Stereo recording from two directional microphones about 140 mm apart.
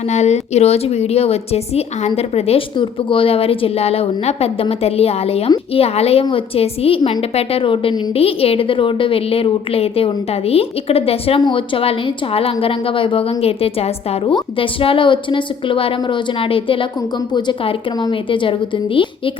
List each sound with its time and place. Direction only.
0.1 s a woman's voice: 55° left (ahead or behind); by 18.5 s 40° left (ahead or behind)